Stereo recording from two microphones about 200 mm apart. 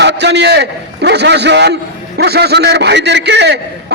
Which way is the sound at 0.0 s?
60° right (ahead or behind).